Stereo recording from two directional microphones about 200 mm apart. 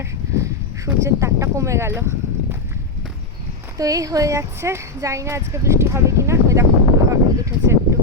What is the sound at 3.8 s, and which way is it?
Speech, 15° right (ahead or behind).